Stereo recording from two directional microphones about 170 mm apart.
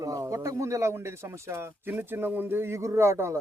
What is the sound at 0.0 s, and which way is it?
Speech, 20° right (ahead or behind).